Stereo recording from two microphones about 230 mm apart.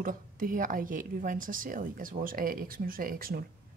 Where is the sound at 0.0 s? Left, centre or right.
Right.